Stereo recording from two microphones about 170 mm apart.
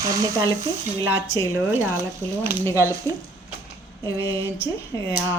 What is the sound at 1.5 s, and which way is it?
Speech, 15° right (ahead or behind).